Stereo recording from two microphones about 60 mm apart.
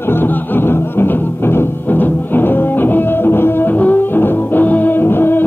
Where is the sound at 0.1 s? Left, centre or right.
Left.